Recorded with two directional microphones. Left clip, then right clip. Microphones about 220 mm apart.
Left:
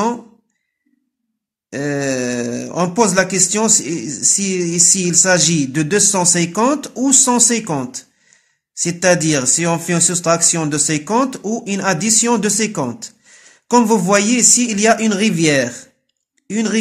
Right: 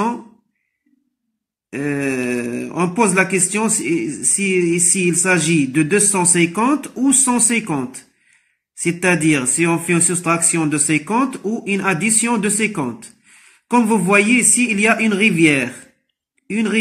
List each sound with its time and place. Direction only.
1.7 s speech: 45° left (ahead or behind)